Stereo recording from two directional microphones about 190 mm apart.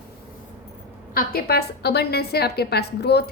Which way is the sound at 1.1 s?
50° left (ahead or behind).